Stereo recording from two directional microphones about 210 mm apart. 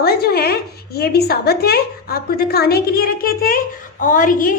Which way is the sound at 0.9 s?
50° left (ahead or behind).